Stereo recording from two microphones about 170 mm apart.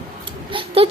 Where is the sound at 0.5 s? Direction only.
35° right (ahead or behind).